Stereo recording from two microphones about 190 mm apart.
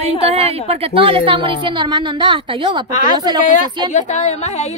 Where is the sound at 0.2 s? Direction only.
30° right (ahead or behind).